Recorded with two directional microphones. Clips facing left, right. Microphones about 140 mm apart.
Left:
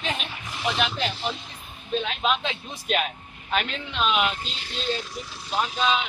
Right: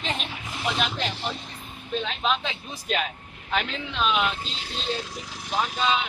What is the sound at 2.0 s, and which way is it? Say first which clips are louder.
Speech: even; 10° left (ahead or behind).